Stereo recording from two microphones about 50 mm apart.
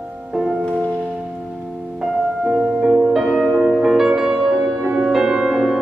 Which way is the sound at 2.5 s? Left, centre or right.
Centre.